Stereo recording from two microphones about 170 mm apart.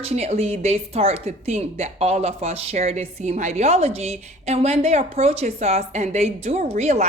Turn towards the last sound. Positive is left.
turn(degrees=-40)  # may be behind; listen again after turning